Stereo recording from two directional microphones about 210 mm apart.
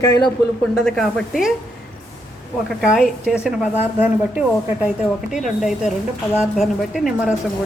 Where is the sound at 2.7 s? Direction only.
Centre (ahead or behind).